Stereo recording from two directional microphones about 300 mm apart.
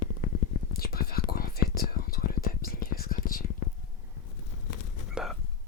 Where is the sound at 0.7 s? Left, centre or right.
Left.